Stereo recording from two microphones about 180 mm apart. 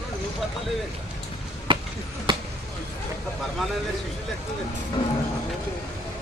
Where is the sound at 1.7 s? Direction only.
30° right (ahead or behind).